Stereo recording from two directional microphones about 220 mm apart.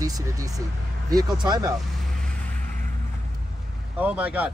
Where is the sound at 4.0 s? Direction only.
5° right (ahead or behind).